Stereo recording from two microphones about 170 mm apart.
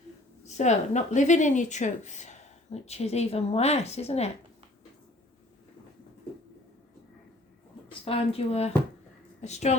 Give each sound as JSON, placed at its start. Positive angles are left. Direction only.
{"t": 0.4, "sound": "speech", "side_deg": 40}
{"t": 7.9, "sound": "speech", "side_deg": 35}